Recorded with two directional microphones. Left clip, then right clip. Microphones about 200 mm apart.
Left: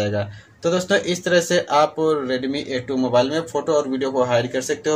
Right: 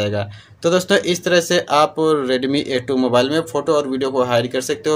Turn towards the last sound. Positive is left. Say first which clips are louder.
# right 2 dB
turn(degrees=-25)  # may be behind; listen again after turning